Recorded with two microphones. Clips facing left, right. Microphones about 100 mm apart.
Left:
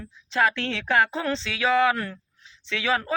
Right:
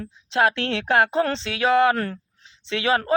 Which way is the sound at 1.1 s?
60° right (ahead or behind).